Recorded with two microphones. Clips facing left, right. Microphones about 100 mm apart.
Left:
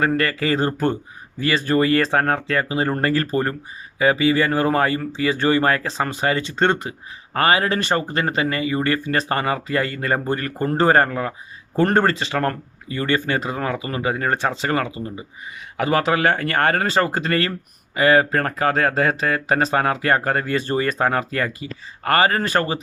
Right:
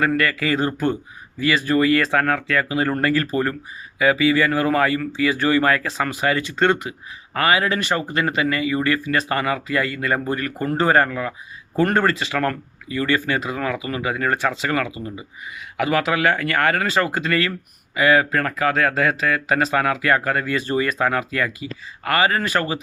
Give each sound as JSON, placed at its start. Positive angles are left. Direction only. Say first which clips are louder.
{"t": 0.0, "sound": "speech", "louder": "even", "side_deg": 35}